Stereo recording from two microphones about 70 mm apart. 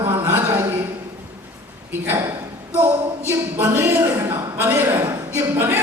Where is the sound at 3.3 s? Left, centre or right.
Right.